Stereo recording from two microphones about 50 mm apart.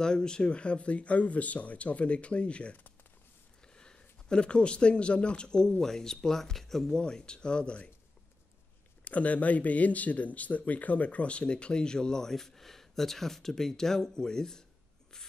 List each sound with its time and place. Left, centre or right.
0.0 s speech: centre
9.0 s speech: left; by 14.6 s centre